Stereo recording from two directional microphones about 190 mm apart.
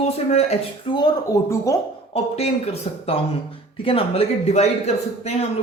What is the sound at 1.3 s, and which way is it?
Speech, 15° left (ahead or behind).